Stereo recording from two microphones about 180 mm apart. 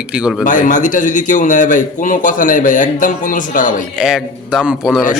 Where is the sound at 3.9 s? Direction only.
5° right (ahead or behind).